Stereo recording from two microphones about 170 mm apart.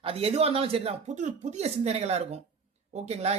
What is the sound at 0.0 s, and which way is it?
Speech, 35° right (ahead or behind).